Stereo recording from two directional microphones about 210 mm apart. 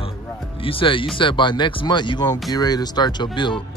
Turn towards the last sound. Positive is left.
turn(degrees=20)  # may be behind; listen again after turning